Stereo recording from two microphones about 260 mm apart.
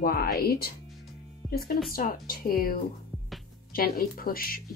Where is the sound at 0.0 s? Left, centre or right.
Left.